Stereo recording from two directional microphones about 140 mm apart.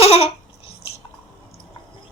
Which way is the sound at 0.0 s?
45° left (ahead or behind).